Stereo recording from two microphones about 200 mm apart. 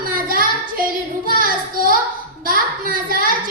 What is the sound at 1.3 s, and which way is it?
Child singing, 45° right (ahead or behind).